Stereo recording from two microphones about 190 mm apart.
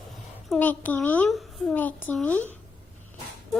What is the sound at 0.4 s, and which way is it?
A child's voice, 5° left (ahead or behind).